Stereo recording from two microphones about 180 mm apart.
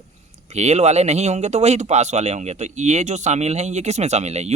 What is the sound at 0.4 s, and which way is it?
Speech, 40° right (ahead or behind).